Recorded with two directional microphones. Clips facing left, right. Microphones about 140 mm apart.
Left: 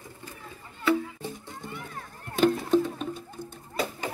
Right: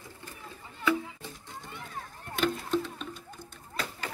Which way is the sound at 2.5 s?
45° left (ahead or behind).